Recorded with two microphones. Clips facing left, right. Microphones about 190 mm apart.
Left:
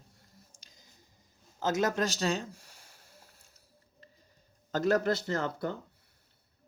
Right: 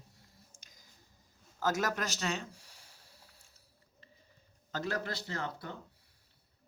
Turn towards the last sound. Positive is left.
turn(degrees=45)  # may be behind; listen again after turning